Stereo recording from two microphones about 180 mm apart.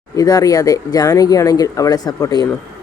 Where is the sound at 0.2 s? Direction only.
20° left (ahead or behind).